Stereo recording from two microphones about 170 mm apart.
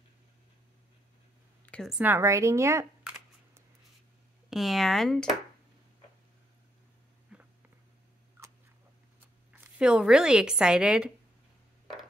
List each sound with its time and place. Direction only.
1.7 s speech: centre (ahead or behind); by 2.9 s 15° right (ahead or behind)
4.5 s speech: centre (ahead or behind)
7.3 s a sound: 5° right (ahead or behind)
9.5 s speech: 5° right (ahead or behind)